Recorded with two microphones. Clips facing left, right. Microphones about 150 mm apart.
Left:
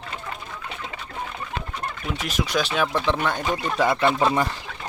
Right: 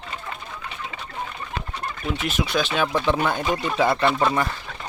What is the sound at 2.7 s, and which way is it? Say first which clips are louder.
Speech: right 2 dB; 5° right (ahead or behind).